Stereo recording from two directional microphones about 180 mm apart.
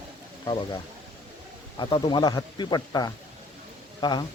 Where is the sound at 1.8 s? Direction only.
30° left (ahead or behind).